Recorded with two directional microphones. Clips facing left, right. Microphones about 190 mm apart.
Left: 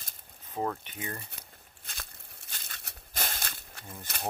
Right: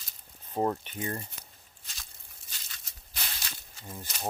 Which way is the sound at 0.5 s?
25° right (ahead or behind).